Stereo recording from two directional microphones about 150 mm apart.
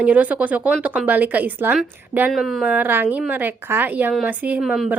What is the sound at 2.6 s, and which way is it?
A woman's voice, 10° right (ahead or behind).